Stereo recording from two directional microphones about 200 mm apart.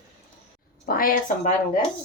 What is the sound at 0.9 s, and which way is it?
Speech, 45° left (ahead or behind).